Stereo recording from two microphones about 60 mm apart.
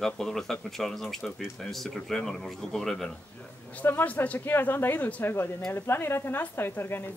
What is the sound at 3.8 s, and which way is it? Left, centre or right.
Speech, left.